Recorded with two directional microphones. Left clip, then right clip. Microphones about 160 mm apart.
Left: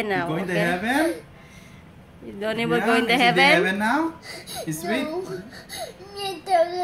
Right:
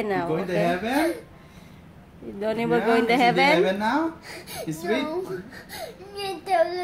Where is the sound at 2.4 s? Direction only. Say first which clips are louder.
Even; 15° right (ahead or behind).